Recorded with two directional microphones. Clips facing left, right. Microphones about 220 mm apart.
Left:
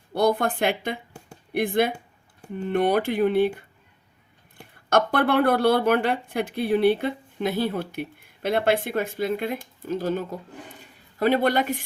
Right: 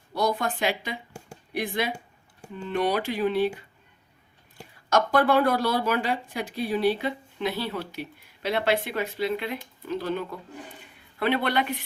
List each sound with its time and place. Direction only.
0.1 s speech: 55° left (ahead or behind)